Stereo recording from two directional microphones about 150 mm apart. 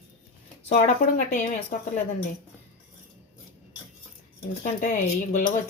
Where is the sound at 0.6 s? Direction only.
50° left (ahead or behind).